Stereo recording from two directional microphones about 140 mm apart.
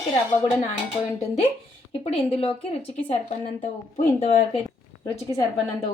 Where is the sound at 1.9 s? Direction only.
40° left (ahead or behind).